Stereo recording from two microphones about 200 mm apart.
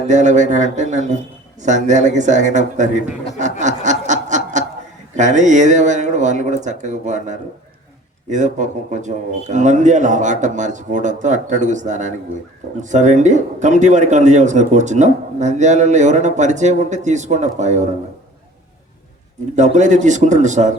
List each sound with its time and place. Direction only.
0.1 s a man's voice: 35° right (ahead or behind)
3.3 s snicker: 35° right (ahead or behind)
5.1 s a man's voice: 35° right (ahead or behind)
19.5 s a man's voice: 35° right (ahead or behind)